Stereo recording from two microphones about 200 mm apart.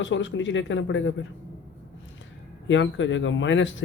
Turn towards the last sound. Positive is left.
turn(degrees=70)  # may be behind; listen again after turning